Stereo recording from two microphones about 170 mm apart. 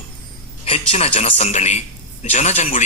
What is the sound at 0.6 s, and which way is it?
A man's voice, 35° left (ahead or behind).